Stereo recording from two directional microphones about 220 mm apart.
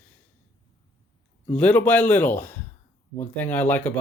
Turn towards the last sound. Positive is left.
turn(degrees=10)  # may be behind; listen again after turning